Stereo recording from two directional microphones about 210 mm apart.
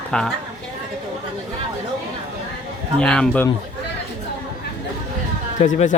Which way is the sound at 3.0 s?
5° left (ahead or behind).